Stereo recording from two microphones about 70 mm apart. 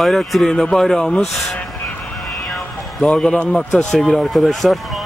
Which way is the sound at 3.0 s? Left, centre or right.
Centre.